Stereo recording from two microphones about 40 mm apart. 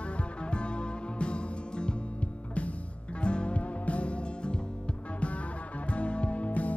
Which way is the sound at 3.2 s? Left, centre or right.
Left.